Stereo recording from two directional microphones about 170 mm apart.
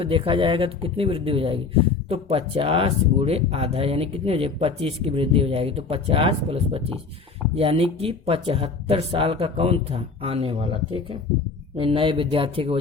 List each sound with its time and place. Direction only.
0.0 s speech: 30° right (ahead or behind)